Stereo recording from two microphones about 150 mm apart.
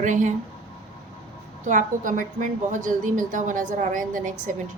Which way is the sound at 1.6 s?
60° right (ahead or behind).